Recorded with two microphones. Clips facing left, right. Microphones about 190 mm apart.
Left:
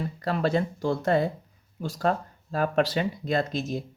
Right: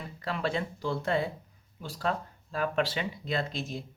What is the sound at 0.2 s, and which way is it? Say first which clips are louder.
Speech: left 6 dB; 40° left (ahead or behind).